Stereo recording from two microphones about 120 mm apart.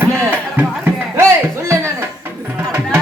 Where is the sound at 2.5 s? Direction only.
20° right (ahead or behind).